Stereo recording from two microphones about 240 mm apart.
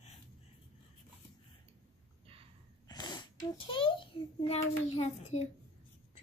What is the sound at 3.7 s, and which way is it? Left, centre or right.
A child's voice, left.